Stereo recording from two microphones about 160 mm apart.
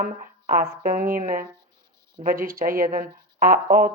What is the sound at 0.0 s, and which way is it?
Speech, 60° right (ahead or behind).